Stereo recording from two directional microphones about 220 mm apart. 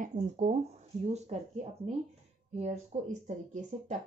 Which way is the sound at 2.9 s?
30° right (ahead or behind).